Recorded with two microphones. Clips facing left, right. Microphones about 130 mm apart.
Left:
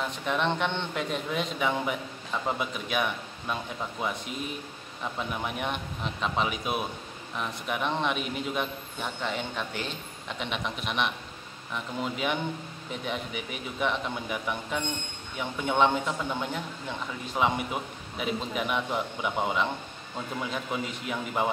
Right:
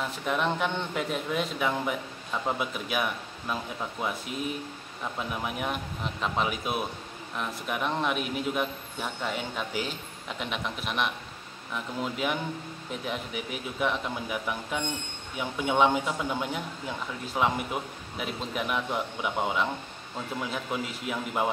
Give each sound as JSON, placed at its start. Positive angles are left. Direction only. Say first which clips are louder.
{"t": 0.0, "sound": "a man's voice", "louder": "even", "side_deg": -5}